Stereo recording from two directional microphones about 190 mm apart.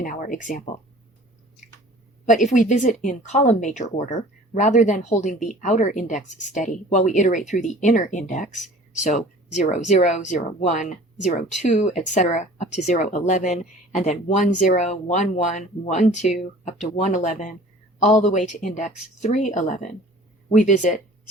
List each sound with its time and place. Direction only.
0.0 s speech: 45° left (ahead or behind)
2.2 s a woman's voice: 40° left (ahead or behind)